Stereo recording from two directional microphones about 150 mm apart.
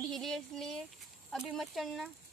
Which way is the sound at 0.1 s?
Centre (ahead or behind).